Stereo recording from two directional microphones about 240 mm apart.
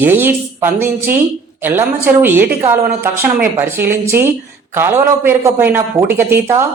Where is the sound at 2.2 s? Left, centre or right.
Centre.